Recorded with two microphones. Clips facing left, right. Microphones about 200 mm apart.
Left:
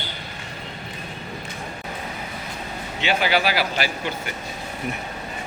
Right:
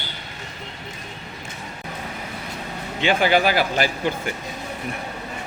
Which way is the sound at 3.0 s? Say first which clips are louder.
Right 4 dB; 50° right (ahead or behind).